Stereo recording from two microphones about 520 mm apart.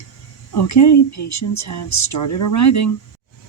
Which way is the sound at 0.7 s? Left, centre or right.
Left.